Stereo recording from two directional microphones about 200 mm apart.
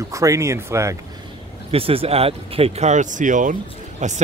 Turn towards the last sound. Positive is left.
turn(degrees=-35)  # may be behind; listen again after turning